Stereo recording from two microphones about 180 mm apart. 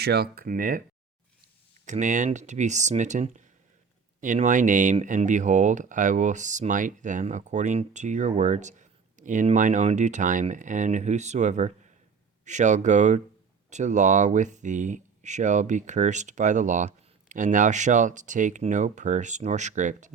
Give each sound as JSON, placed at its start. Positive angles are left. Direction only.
{"t": 0.0, "sound": "speech", "side_deg": -65}
{"t": 1.8, "sound": "speech", "side_deg": -45}